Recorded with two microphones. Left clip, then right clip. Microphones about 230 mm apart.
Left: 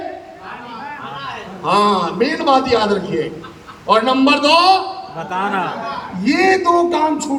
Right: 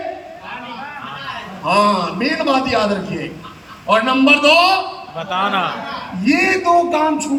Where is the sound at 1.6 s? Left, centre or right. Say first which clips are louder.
Even; centre.